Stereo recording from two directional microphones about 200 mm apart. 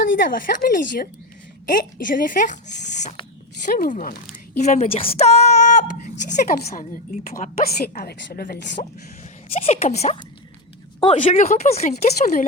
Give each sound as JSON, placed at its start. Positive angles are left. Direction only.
{"t": 0.1, "sound": "a woman's voice", "side_deg": 45}
{"t": 9.5, "sound": "speech", "side_deg": 30}